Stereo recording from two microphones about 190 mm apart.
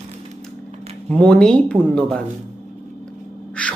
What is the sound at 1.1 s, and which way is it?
Speech, 5° left (ahead or behind).